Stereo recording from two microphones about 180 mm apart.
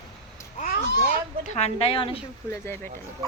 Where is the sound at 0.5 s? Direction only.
50° left (ahead or behind).